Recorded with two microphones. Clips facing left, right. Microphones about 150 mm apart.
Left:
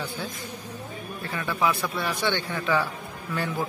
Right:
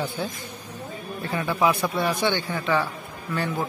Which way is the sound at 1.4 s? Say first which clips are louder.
Right 3 dB; 20° right (ahead or behind).